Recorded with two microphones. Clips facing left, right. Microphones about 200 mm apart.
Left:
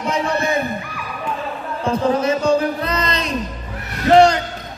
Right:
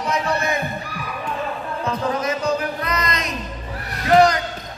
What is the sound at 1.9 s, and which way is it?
Music, 30° left (ahead or behind).